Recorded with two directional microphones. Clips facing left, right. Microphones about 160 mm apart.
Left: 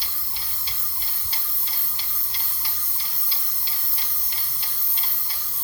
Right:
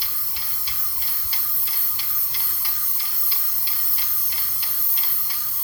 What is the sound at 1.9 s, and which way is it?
Tick-tock, 25° left (ahead or behind).